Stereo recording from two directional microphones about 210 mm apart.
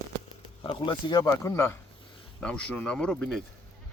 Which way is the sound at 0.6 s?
20° left (ahead or behind).